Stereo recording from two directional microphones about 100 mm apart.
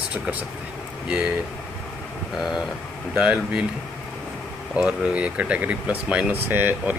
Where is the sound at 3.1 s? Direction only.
10° right (ahead or behind).